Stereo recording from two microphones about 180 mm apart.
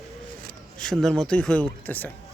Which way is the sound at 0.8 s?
Centre (ahead or behind).